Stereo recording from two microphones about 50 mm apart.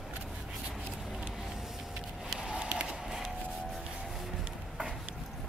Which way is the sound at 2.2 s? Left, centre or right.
Centre.